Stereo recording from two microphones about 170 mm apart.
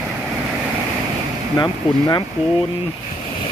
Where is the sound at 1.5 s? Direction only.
20° left (ahead or behind).